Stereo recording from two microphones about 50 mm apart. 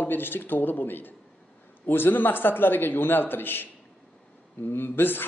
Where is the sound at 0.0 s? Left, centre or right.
Left.